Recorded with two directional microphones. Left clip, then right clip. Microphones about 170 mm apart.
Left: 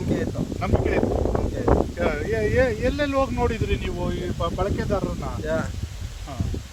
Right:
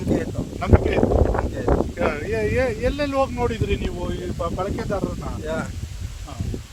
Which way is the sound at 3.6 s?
5° left (ahead or behind).